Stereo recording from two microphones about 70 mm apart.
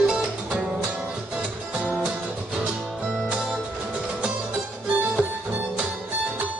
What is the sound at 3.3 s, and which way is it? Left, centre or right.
Music, centre.